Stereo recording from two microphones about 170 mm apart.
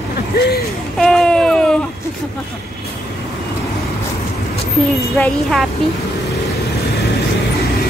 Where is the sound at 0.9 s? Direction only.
Centre (ahead or behind).